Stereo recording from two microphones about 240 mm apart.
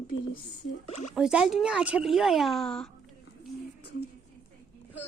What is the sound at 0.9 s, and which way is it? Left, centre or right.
Speech, left.